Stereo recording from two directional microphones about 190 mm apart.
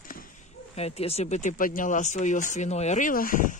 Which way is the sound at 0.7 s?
35° left (ahead or behind).